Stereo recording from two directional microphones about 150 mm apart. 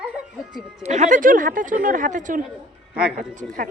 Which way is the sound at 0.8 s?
55° right (ahead or behind).